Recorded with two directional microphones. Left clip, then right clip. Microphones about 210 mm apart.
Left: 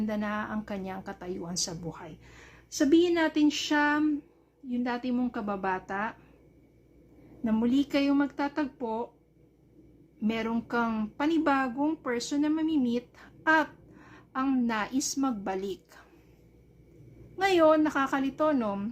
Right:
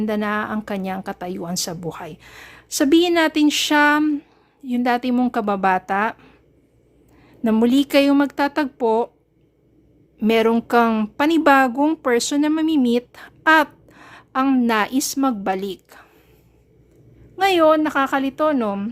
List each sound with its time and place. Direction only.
0.0 s speech: 40° right (ahead or behind)
7.4 s speech: 45° right (ahead or behind)
10.2 s speech: 45° right (ahead or behind)
17.3 s a woman's voice: 35° right (ahead or behind)